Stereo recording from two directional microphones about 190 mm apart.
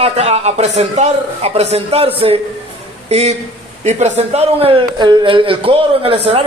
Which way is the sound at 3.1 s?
35° right (ahead or behind).